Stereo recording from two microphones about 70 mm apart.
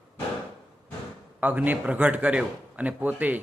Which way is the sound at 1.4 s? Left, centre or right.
Right.